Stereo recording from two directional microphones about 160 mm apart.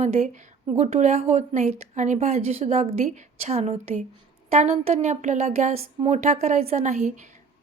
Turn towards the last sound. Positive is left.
turn(degrees=-45)  # may be behind; listen again after turning